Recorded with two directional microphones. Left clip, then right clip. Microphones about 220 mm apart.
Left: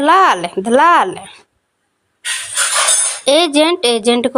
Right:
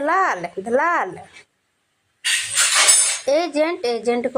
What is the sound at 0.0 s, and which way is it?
Speech, 45° left (ahead or behind).